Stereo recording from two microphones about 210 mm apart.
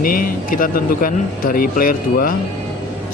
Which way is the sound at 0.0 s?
45° left (ahead or behind).